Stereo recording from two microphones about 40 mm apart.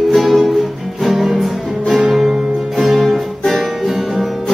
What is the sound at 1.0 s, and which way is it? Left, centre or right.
Music, centre.